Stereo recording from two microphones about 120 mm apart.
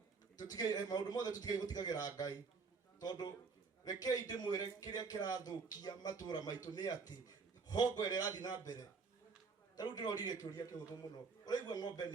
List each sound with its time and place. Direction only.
0.3 s speech: 35° left (ahead or behind)
11.4 s speech: 35° left (ahead or behind)